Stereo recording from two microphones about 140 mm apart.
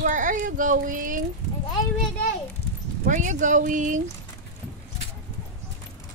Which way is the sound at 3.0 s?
65° right (ahead or behind).